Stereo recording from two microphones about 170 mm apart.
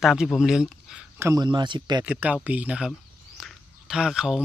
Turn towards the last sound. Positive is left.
turn(degrees=-5)  # may be behind; listen again after turning